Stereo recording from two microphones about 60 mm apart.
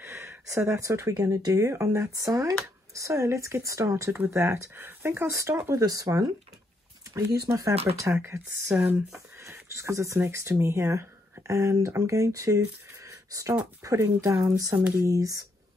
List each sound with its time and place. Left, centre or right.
0.0 s speech: right
1.7 s speech: right
4.3 s speech: right
5.7 s speech: right
7.5 s speech: right
8.1 s speech: right
8.7 s speech: right
9.4 s speech: right
10.2 s speech: right
15.0 s speech: right